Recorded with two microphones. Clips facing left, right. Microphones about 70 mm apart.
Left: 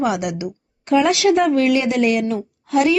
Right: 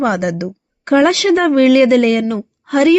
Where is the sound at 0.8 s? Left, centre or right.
Right.